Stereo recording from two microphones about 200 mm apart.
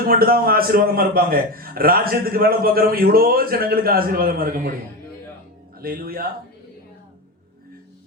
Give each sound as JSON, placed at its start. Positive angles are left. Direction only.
{"t": 0.0, "sound": "a man's voice", "side_deg": -45}
{"t": 5.8, "sound": "a man's voice", "side_deg": -45}